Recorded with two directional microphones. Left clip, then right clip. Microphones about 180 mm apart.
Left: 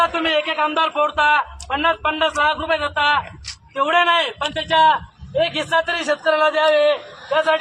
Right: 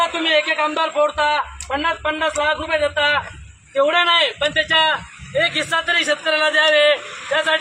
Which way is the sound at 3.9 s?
Centre (ahead or behind).